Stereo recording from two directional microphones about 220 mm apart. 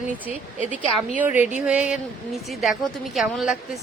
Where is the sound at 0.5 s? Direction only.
35° right (ahead or behind).